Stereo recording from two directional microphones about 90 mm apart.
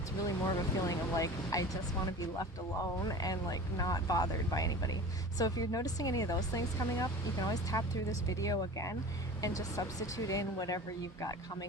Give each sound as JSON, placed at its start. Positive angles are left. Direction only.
{"t": 0.3, "sound": "speech", "side_deg": 40}
{"t": 3.0, "sound": "speech", "side_deg": 45}